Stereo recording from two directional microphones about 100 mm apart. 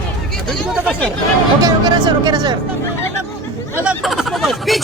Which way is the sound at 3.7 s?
15° right (ahead or behind).